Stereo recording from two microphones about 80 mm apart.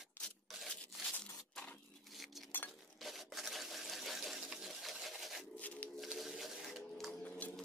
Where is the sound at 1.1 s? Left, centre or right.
Centre.